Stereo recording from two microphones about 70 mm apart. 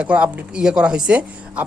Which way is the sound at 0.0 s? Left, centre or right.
Centre.